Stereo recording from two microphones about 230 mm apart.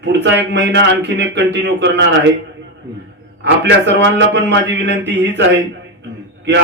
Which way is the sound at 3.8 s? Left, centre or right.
Right.